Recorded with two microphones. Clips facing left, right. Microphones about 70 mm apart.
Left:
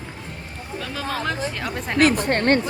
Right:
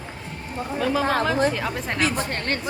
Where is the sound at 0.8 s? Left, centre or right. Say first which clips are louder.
Right 6 dB; centre.